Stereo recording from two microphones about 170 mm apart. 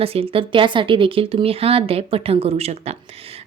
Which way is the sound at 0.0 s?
35° right (ahead or behind).